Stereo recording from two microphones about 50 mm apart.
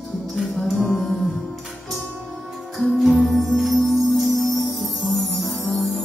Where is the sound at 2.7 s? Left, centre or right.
Centre.